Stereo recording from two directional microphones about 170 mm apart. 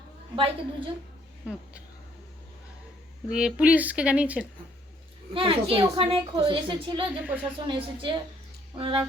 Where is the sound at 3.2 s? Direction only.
5° right (ahead or behind).